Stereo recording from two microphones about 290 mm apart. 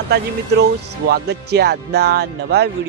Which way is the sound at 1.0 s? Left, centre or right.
Right.